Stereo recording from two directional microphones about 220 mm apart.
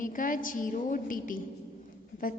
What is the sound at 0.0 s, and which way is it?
A woman's voice, 40° left (ahead or behind).